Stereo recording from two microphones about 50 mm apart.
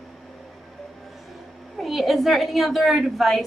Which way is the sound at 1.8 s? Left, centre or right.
Centre.